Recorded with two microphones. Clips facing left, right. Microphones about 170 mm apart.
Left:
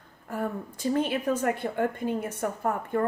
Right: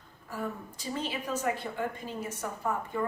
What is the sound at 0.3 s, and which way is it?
A woman's voice, 55° left (ahead or behind).